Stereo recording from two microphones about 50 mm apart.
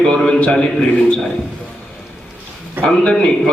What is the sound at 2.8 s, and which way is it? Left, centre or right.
Speech, centre.